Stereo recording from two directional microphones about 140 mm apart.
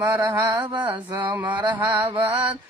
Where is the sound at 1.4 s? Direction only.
10° right (ahead or behind).